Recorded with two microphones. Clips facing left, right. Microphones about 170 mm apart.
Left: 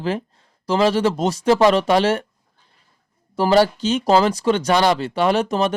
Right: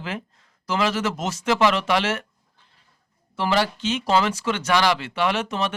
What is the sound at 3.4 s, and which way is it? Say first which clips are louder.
Speech: left 7 dB; 35° left (ahead or behind).